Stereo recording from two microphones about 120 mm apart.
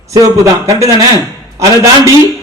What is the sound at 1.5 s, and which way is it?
Speech, 25° right (ahead or behind).